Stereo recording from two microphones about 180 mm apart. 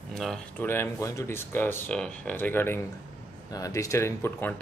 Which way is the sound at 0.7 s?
15° left (ahead or behind).